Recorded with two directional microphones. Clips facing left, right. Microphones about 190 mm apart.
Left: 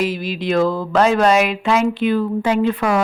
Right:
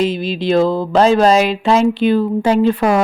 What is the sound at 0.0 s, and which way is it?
Speech, 25° right (ahead or behind).